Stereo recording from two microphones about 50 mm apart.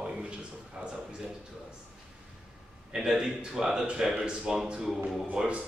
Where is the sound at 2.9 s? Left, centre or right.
Centre.